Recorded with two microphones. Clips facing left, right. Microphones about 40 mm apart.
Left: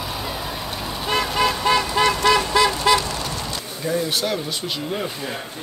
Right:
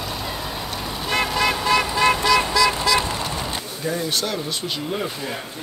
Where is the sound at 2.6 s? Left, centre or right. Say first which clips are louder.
Even; left.